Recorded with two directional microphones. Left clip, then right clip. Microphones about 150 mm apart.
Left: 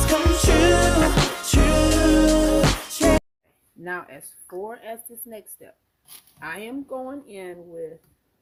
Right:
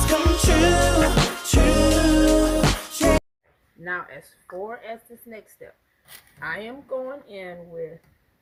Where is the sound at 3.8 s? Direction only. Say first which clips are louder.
Right 2 dB; 55° left (ahead or behind).